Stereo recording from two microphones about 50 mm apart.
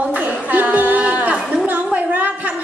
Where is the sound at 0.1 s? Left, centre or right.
Right.